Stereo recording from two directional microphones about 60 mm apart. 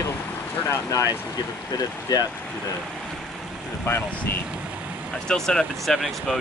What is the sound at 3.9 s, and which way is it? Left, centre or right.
Speech, left.